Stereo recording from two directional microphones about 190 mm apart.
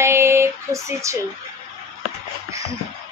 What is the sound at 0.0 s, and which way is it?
Female singing, 15° right (ahead or behind).